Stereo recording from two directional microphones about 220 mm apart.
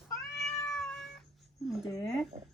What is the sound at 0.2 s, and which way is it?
Cat, centre (ahead or behind).